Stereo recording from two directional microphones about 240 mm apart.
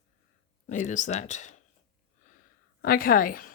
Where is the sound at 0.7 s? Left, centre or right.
Left.